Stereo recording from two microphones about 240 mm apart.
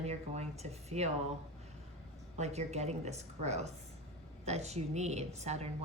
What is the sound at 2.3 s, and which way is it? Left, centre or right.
Speech, right.